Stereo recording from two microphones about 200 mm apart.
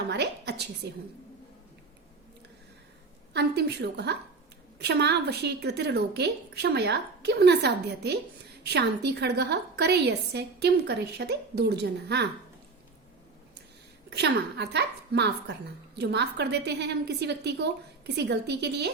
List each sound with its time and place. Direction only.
0.1 s a woman's voice: 55° right (ahead or behind)
3.3 s a woman's voice: 55° right (ahead or behind)
14.1 s a woman's voice: 55° right (ahead or behind)